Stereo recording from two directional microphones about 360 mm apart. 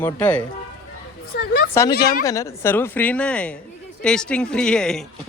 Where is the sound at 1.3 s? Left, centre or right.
Left.